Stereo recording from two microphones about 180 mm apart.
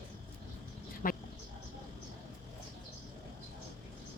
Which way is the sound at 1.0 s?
50° left (ahead or behind).